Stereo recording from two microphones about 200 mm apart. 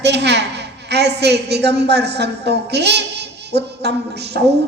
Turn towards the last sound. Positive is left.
turn(degrees=-55)  # may be behind; listen again after turning